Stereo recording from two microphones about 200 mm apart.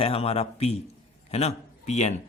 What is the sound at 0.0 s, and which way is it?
Speech, 30° left (ahead or behind).